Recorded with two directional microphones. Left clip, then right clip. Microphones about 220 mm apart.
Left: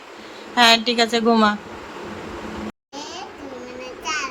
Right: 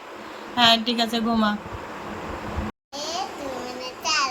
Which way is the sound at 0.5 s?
15° left (ahead or behind).